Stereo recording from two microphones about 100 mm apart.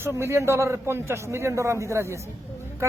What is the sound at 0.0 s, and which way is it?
A man's voice, 25° right (ahead or behind).